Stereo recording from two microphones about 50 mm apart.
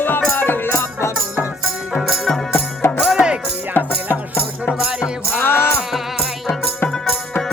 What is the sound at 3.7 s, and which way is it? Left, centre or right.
Music, left.